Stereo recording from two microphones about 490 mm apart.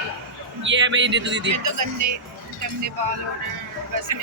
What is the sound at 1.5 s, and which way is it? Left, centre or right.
Speech, right.